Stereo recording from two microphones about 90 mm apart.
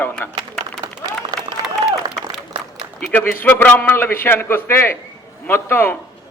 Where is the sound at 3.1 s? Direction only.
20° left (ahead or behind).